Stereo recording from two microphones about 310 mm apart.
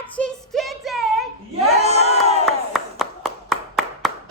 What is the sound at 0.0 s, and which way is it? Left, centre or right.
Child singing, centre.